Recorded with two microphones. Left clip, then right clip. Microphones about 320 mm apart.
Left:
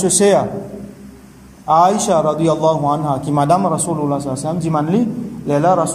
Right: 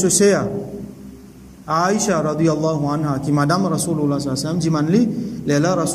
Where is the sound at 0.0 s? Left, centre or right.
Centre.